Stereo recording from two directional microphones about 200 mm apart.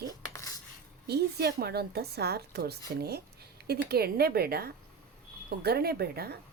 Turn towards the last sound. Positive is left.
turn(degrees=-50)  # may be behind; listen again after turning